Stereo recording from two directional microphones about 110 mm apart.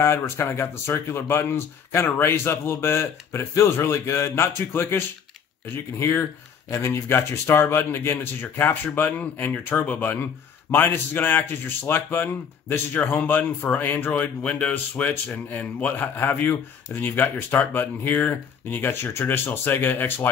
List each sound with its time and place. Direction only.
0.0 s speech: 20° left (ahead or behind)